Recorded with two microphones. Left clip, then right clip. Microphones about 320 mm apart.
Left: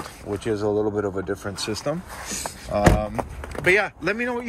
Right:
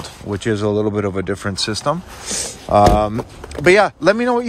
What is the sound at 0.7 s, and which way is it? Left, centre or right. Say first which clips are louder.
Speech: right 3 dB; right.